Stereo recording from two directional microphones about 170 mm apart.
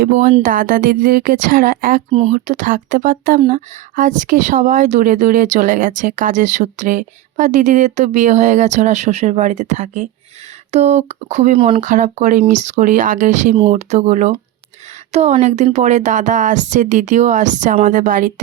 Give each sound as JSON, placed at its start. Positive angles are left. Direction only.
{"t": 0.0, "sound": "speech", "side_deg": -50}
{"t": 11.8, "sound": "speech", "side_deg": -45}